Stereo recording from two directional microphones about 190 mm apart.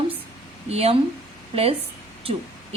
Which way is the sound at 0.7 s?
35° right (ahead or behind).